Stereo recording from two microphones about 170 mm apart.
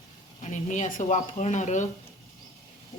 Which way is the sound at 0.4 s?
45° left (ahead or behind).